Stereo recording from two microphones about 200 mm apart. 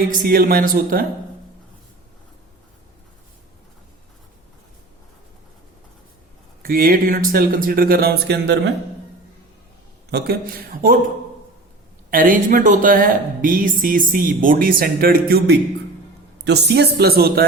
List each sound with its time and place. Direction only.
0.1 s a woman's voice: 45° right (ahead or behind)
6.6 s a woman's voice: 45° right (ahead or behind)
10.1 s a woman's voice: 55° right (ahead or behind)
12.1 s a woman's voice: 45° right (ahead or behind)